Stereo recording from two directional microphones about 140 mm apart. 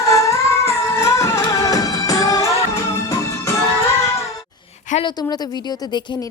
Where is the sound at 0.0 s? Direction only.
20° left (ahead or behind).